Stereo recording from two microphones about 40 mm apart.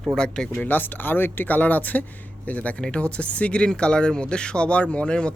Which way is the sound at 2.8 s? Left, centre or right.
Left.